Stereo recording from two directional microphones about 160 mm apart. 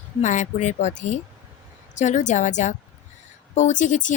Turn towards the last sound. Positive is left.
turn(degrees=50)  # may be behind; listen again after turning